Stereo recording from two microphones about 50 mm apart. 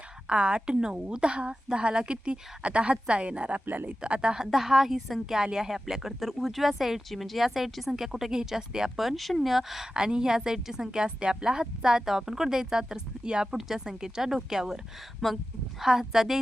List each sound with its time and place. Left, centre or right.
0.3 s a woman's voice: right; by 9.9 s centre
9.9 s a woman's voice: centre
15.2 s speech: centre
15.8 s a woman's voice: centre